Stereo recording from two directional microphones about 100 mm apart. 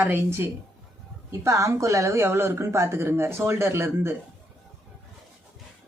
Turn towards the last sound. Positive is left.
turn(degrees=-25)  # may be behind; listen again after turning